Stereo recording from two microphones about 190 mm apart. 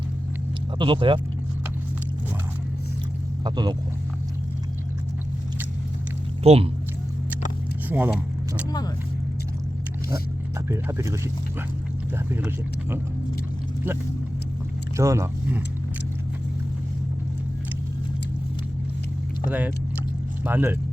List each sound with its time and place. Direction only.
0.8 s speech: 25° right (ahead or behind)
3.4 s speech: 20° right (ahead or behind)
6.4 s speech: 35° right (ahead or behind)
7.9 s speech: 10° right (ahead or behind)
10.7 s speech: 15° right (ahead or behind)
12.3 s speech: 10° right (ahead or behind)
14.9 s speech: 15° right (ahead or behind)
19.5 s speech: 10° right (ahead or behind)